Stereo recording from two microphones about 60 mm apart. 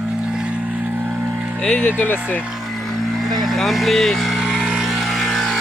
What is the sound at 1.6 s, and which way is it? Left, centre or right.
Speech, centre.